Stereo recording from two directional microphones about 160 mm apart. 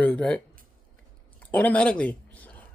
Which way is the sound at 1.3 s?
10° left (ahead or behind).